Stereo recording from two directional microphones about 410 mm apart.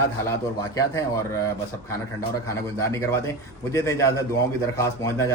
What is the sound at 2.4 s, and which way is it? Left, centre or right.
Speech, centre.